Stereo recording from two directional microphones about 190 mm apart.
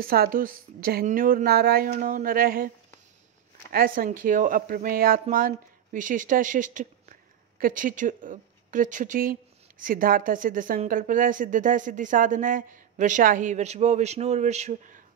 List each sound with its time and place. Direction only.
0.0 s speech: 50° right (ahead or behind)
3.7 s speech: 50° right (ahead or behind)